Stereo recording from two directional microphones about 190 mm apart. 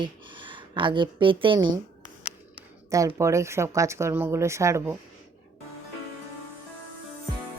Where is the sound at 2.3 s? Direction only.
5° right (ahead or behind).